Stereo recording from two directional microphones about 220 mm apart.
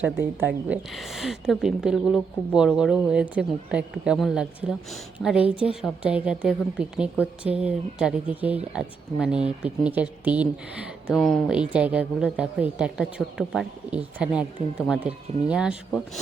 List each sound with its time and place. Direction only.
0.0 s speech: 10° right (ahead or behind)